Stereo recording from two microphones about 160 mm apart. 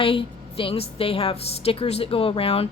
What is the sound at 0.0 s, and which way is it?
A woman's voice, 35° left (ahead or behind).